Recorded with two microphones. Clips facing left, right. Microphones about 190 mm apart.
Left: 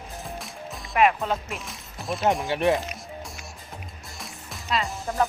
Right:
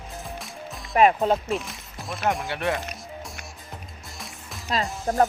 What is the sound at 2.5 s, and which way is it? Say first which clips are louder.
Speech: left 5 dB; 15° left (ahead or behind).